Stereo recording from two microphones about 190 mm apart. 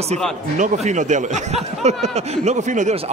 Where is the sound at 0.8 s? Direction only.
40° right (ahead or behind).